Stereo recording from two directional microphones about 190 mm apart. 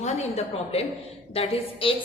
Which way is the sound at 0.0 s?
35° left (ahead or behind).